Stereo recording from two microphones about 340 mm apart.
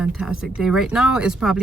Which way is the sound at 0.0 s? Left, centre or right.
Centre.